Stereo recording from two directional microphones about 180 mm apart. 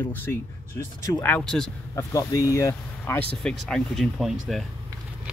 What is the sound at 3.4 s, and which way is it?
Speech, 5° left (ahead or behind).